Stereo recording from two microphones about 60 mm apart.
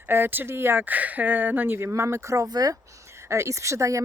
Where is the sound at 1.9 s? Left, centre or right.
Right.